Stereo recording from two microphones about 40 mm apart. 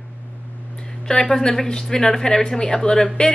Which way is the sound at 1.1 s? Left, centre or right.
Centre.